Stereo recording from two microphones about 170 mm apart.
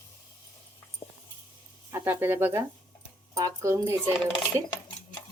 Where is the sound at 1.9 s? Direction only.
15° right (ahead or behind).